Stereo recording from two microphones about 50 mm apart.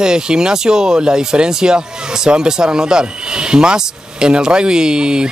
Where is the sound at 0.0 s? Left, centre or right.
Centre.